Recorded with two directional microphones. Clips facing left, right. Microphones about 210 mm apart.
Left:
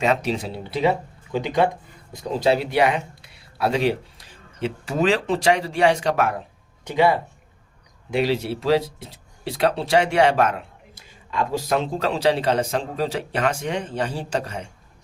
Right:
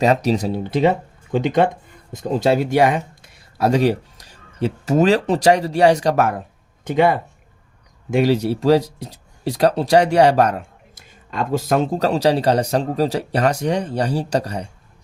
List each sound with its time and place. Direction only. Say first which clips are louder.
0.0 s speech: right 5 dB; 40° right (ahead or behind)